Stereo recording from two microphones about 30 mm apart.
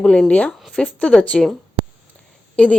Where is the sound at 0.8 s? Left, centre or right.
Left.